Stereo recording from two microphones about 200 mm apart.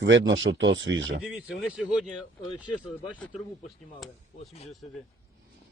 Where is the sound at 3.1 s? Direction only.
5° left (ahead or behind).